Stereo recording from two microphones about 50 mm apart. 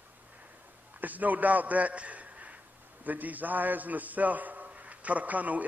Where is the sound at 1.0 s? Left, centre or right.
Right.